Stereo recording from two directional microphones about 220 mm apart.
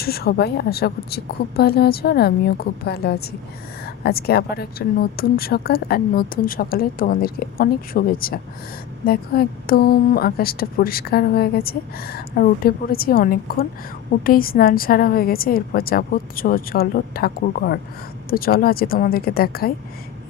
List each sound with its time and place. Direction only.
0.0 s a woman's voice: 45° left (ahead or behind)